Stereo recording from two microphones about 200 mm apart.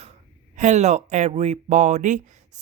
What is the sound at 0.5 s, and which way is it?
Speech, 35° right (ahead or behind).